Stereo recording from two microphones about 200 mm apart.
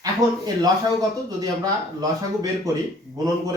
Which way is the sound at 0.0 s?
20° right (ahead or behind).